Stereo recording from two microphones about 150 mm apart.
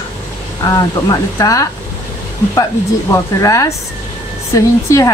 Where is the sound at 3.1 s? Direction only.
20° left (ahead or behind).